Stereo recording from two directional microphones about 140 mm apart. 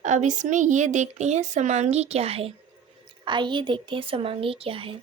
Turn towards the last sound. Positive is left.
turn(degrees=-40)  # may be behind; listen again after turning